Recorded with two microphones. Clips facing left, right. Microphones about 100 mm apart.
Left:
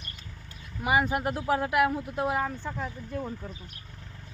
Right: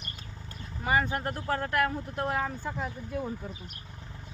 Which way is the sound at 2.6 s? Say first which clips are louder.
Even; 10° right (ahead or behind).